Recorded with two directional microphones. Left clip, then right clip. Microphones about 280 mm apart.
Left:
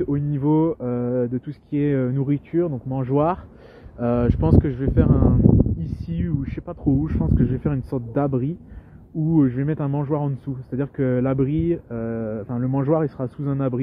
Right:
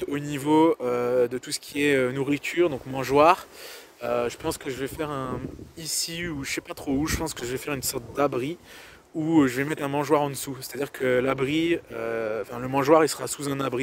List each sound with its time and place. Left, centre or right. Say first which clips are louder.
0.1 s speech: left 1 dB; right
4.0 s speech: left 4 dB; centre